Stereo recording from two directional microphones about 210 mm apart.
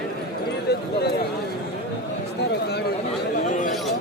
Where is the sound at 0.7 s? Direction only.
50° left (ahead or behind).